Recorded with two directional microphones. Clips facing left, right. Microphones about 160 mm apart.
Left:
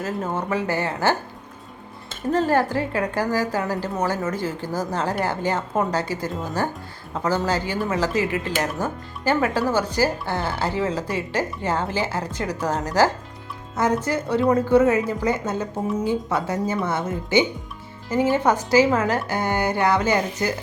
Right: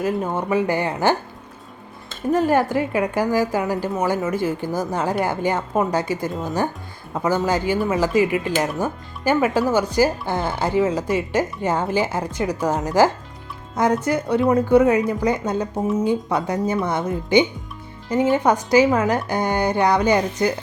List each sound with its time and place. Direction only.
0.0 s speech: 15° right (ahead or behind)
2.3 s speech: 15° right (ahead or behind)